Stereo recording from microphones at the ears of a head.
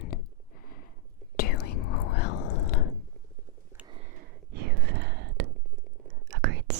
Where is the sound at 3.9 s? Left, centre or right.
Right.